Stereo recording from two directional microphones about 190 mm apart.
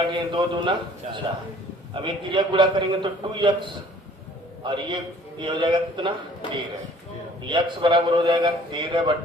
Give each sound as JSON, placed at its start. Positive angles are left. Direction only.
{"t": 0.0, "sound": "a man's voice", "side_deg": -25}
{"t": 4.6, "sound": "a man's voice", "side_deg": -25}
{"t": 7.4, "sound": "a man's voice", "side_deg": -25}